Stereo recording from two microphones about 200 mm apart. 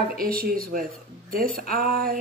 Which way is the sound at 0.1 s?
45° right (ahead or behind).